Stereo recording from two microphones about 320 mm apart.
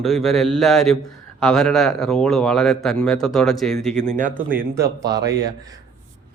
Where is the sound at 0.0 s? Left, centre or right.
Centre.